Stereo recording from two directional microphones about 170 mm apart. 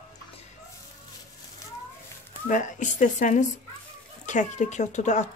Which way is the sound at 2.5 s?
50° left (ahead or behind).